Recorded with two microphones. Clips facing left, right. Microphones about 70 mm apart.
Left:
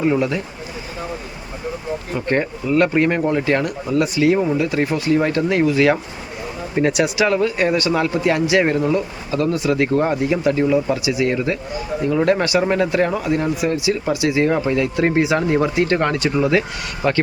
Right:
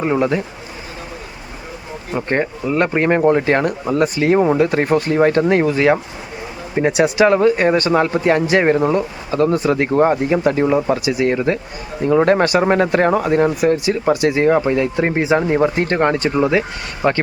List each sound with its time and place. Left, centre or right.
0.0 s speech: right
2.1 s speech: right
14.4 s speech: right
15.7 s speech: right